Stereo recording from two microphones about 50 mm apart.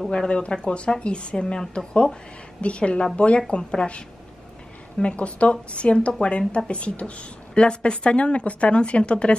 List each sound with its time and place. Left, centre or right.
0.1 s speech: left
5.0 s speech: left